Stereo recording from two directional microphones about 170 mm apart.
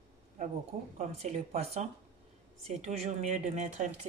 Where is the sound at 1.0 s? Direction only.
40° right (ahead or behind).